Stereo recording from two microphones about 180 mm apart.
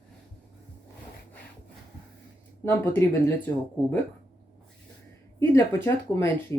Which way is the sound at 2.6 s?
10° left (ahead or behind).